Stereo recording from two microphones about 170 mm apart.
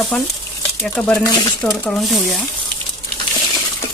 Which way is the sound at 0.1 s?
10° left (ahead or behind).